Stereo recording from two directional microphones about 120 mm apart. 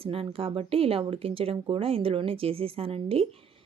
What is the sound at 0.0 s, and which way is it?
A woman's voice, 50° right (ahead or behind).